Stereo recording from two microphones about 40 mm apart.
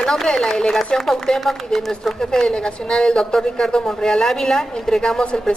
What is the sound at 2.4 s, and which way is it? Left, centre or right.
A woman's voice, left.